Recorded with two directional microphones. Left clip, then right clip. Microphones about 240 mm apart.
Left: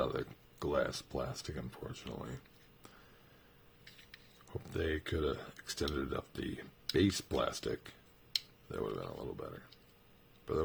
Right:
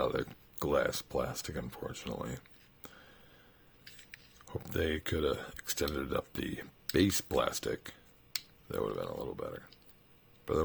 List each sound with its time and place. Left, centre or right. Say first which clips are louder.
0.0 s speech: right 3 dB; right
4.4 s speech: right 3 dB; right